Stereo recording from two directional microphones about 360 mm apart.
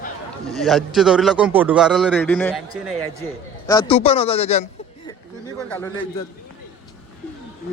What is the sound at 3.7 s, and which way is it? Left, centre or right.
Speech, centre.